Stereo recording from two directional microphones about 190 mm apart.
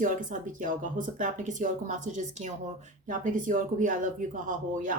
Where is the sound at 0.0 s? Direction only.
45° right (ahead or behind).